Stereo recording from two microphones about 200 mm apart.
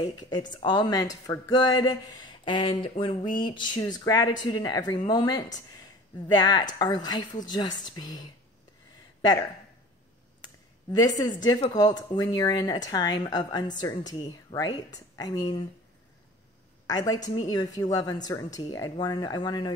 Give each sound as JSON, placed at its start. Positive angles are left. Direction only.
{"t": 0.2, "sound": "speech", "side_deg": 20}
{"t": 10.9, "sound": "speech", "side_deg": 20}
{"t": 16.8, "sound": "speech", "side_deg": 20}